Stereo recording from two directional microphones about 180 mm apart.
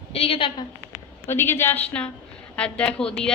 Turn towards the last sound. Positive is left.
turn(degrees=5)  # may be behind; listen again after turning